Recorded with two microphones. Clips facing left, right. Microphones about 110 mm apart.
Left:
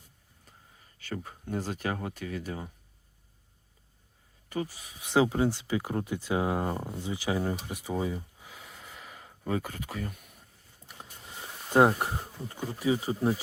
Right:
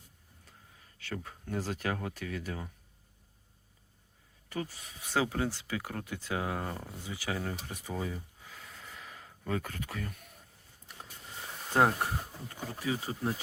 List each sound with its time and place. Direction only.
0.9 s speech: 5° left (ahead or behind)
4.4 s speech: 5° left (ahead or behind)
5.0 s speech: 20° left (ahead or behind)
11.7 s speech: 15° left (ahead or behind)